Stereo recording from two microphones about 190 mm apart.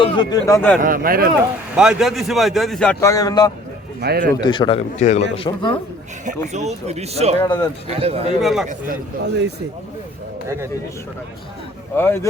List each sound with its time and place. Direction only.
0.0 s speech: 25° left (ahead or behind)
0.8 s speech: 50° right (ahead or behind)
1.7 s a man's voice: 5° right (ahead or behind); by 3.5 s 20° left (ahead or behind)
4.0 s speech: 55° right (ahead or behind)
4.3 s a man's voice: 25° left (ahead or behind)
4.9 s a man's voice: 35° left (ahead or behind)
5.5 s a man's voice: 25° left (ahead or behind)
6.2 s speech: 35° right (ahead or behind)
7.3 s a man's voice: 25° left (ahead or behind)
7.9 s speech: 30° right (ahead or behind)
8.4 s a man's voice: centre (ahead or behind)
11.9 s speech: 10° left (ahead or behind)